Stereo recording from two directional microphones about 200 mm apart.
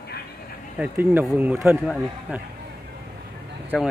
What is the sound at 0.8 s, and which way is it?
Speech, 10° right (ahead or behind).